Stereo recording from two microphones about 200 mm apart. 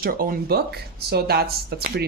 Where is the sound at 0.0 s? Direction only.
45° right (ahead or behind).